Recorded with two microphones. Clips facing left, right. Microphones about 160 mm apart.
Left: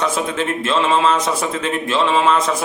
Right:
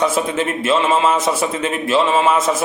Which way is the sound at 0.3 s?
5° right (ahead or behind).